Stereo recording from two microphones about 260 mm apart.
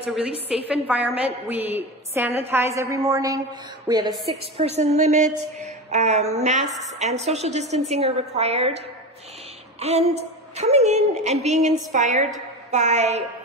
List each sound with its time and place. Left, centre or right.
0.7 s a woman's voice: centre; by 8.7 s right
9.8 s a woman's voice: right